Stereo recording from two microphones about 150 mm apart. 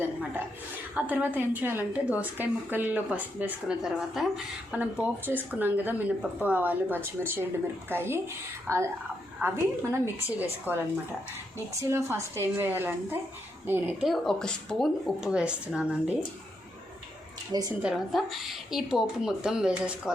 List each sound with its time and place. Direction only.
0.0 s a woman's voice: 15° right (ahead or behind)
10.7 s a woman's voice: 10° right (ahead or behind)
14.0 s speech: centre (ahead or behind)
17.5 s a woman's voice: 25° right (ahead or behind)
17.8 s speech: centre (ahead or behind)